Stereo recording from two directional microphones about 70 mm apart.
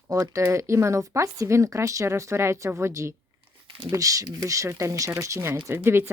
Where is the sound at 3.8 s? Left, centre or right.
Right.